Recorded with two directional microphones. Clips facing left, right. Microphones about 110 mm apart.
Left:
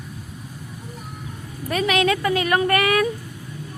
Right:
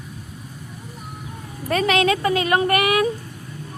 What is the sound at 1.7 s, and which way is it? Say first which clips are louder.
Speech: right 1 dB; 35° right (ahead or behind).